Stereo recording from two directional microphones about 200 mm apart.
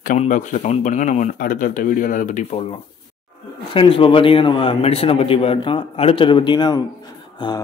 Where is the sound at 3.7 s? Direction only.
25° left (ahead or behind).